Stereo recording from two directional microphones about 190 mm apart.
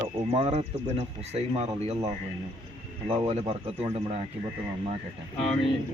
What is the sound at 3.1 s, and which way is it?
Speech, 35° right (ahead or behind).